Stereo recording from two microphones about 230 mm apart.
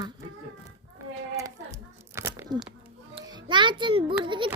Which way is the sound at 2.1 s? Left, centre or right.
Centre.